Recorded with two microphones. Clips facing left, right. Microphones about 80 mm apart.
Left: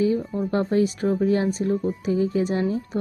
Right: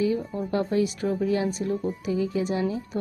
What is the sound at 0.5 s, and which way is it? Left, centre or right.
A woman's voice, left.